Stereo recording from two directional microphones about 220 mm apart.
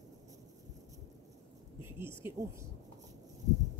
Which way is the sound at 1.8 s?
10° right (ahead or behind).